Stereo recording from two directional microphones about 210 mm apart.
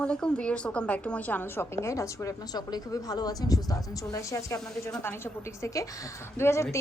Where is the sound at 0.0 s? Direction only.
5° left (ahead or behind).